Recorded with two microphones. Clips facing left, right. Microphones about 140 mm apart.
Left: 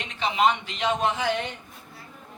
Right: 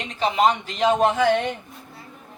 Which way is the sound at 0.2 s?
40° right (ahead or behind).